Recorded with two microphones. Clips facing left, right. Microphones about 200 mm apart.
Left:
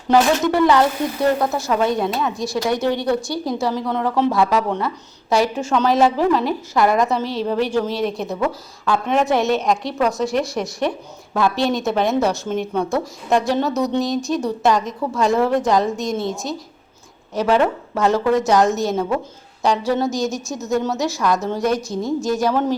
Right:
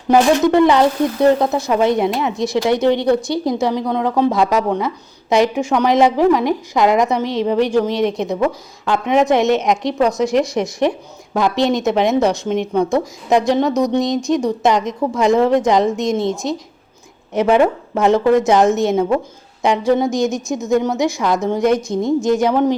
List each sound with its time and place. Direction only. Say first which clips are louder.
0.1 s a woman's voice: right 4 dB; 20° right (ahead or behind)
17.3 s a woman's voice: right 4 dB; 20° right (ahead or behind)